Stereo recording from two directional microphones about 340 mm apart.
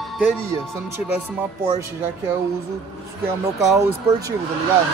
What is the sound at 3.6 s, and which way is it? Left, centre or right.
Speech, centre.